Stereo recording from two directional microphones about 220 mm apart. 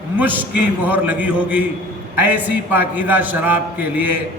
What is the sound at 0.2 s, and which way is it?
A man's voice, 10° right (ahead or behind).